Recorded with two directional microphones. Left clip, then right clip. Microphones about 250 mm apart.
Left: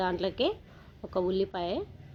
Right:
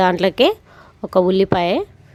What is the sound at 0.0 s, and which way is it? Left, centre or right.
A woman's voice, right.